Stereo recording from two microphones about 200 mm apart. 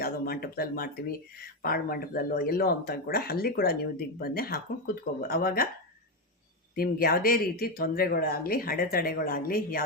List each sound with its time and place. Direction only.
0.0 s speech: 50° left (ahead or behind)
6.7 s speech: 45° left (ahead or behind)